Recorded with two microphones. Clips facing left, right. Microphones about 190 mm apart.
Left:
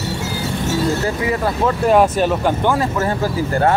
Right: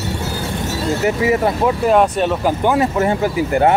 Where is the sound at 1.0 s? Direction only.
25° right (ahead or behind).